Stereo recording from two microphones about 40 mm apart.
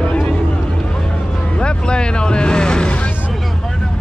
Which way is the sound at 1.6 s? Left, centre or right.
Left.